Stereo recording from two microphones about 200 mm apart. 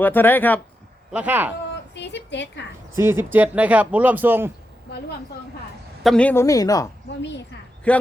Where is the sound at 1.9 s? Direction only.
60° left (ahead or behind).